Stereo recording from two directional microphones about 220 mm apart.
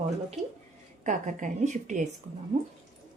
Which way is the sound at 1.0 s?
35° right (ahead or behind).